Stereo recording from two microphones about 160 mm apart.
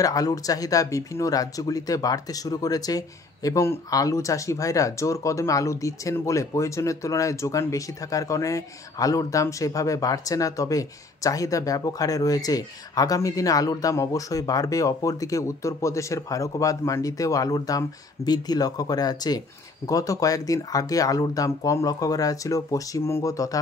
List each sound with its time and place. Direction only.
0.0 s speech: 20° left (ahead or behind)